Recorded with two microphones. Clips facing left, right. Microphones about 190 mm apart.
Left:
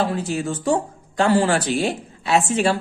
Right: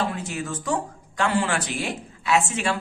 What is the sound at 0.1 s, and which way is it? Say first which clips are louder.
Speech: left 6 dB; 30° left (ahead or behind).